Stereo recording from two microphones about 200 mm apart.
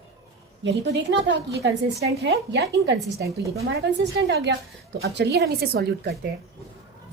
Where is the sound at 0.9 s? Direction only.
65° right (ahead or behind).